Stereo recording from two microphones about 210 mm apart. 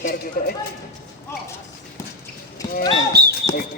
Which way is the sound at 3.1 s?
50° right (ahead or behind).